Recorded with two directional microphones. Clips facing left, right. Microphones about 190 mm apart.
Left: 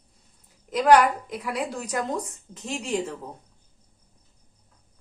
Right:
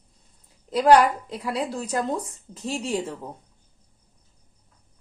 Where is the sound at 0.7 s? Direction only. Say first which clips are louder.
Right 1 dB; 30° right (ahead or behind).